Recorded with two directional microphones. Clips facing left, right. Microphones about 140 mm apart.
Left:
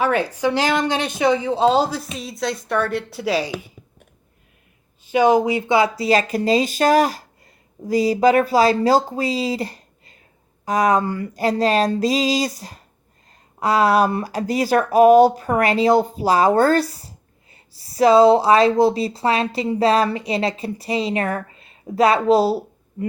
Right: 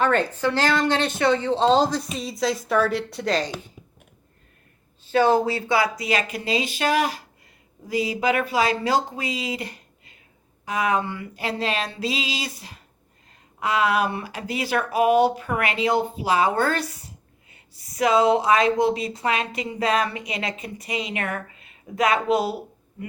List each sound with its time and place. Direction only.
0.0 s a woman's voice: 10° left (ahead or behind)
5.0 s speech: 15° left (ahead or behind); by 23.0 s 35° left (ahead or behind)